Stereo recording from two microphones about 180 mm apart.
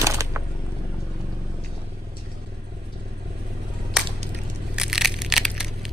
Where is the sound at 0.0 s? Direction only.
15° right (ahead or behind).